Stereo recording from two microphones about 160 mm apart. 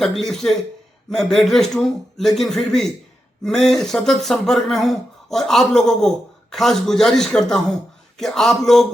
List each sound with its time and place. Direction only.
0.0 s speech: centre (ahead or behind)